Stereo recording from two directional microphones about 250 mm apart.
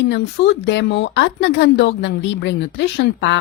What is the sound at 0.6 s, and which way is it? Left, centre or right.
A woman's voice, left.